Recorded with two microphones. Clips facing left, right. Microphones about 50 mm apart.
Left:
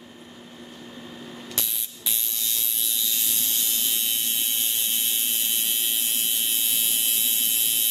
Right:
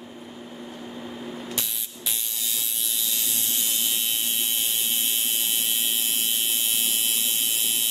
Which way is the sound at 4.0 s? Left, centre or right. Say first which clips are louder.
Right 1 dB; centre.